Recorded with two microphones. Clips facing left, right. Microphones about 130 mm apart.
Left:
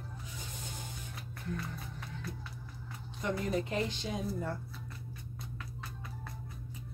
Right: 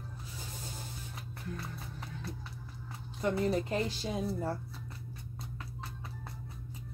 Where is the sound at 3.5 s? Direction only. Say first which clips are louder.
Right 1 dB; 35° right (ahead or behind).